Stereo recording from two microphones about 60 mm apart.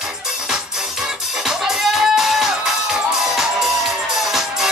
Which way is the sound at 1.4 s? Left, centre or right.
Centre.